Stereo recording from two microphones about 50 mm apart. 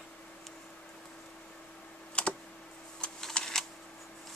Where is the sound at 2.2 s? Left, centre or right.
Left.